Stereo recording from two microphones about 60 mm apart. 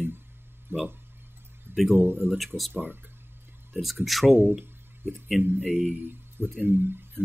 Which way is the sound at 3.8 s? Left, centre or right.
Centre.